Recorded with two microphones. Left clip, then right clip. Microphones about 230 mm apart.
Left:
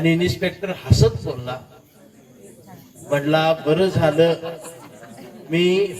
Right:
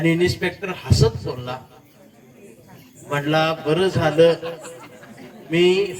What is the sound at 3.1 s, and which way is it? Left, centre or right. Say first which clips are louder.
Speech: left 2 dB; right.